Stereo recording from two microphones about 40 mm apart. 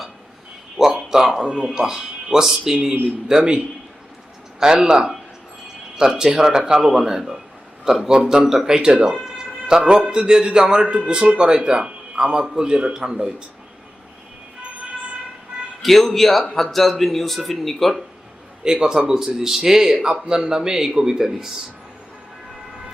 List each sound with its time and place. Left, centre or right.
0.8 s speech: centre
1.5 s a man's voice: right
4.6 s speech: centre
8.9 s speech: right
9.1 s a man's voice: centre
15.8 s a man's voice: centre
18.6 s speech: centre